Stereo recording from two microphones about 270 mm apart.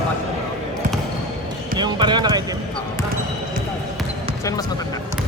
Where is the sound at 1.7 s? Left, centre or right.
Centre.